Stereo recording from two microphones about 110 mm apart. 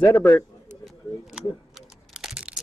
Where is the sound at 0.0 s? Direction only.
20° left (ahead or behind).